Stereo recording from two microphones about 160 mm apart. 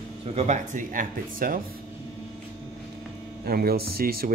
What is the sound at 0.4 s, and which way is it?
Speech, 50° right (ahead or behind).